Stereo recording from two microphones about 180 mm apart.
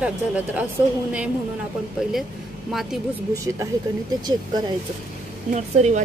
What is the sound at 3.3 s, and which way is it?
Speech, 20° right (ahead or behind).